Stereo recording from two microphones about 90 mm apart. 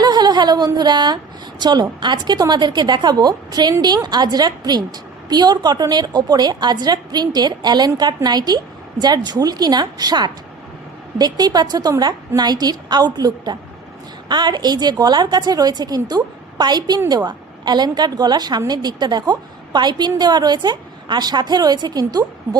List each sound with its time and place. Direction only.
0.0 s a woman's voice: 50° right (ahead or behind)